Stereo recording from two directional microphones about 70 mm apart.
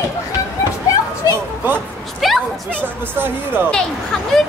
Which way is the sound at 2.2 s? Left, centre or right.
Centre.